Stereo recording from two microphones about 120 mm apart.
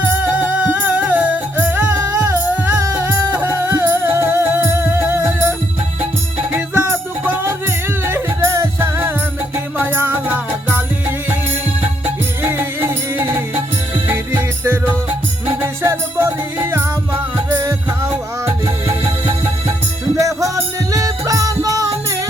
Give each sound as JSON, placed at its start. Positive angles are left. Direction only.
{"t": 0.0, "sound": "music", "side_deg": -15}
{"t": 2.7, "sound": "music", "side_deg": -25}
{"t": 20.1, "sound": "music", "side_deg": -25}